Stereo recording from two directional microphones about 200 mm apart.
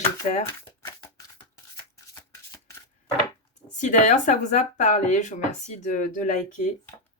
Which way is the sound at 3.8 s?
40° left (ahead or behind).